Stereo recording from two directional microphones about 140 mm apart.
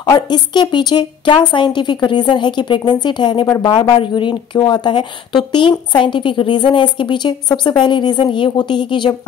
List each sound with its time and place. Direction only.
0.0 s a woman's voice: 30° left (ahead or behind)